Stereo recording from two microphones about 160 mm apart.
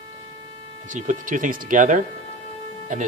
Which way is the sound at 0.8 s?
50° right (ahead or behind).